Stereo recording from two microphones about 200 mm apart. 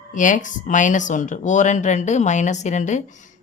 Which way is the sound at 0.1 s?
40° left (ahead or behind).